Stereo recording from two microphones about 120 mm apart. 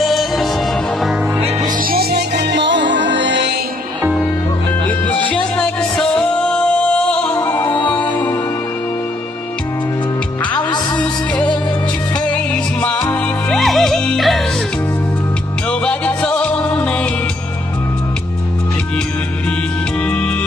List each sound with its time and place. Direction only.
0.0 s music: centre (ahead or behind)
4.8 s music: 15° left (ahead or behind)
7.6 s music: 40° left (ahead or behind)
7.9 s music: 15° left (ahead or behind)
13.1 s music: 5° left (ahead or behind)
15.7 s music: 10° left (ahead or behind)